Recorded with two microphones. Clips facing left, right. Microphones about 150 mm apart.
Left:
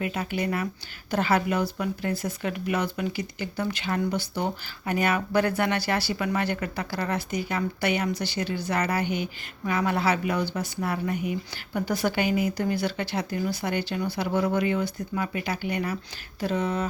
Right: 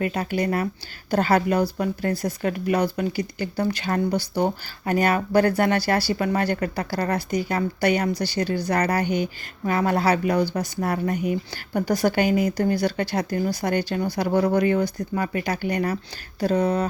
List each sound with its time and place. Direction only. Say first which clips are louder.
0.0 s speech: right 4 dB; 40° right (ahead or behind)